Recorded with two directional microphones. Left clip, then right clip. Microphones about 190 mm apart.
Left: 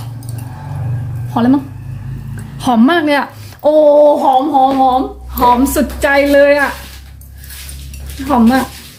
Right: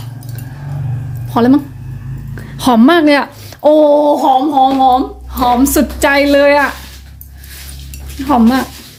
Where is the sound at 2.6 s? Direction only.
35° right (ahead or behind).